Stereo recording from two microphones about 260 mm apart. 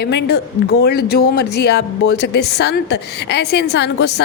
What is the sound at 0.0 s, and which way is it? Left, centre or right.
A woman's voice, left.